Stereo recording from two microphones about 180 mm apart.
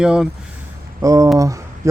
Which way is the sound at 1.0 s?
20° right (ahead or behind).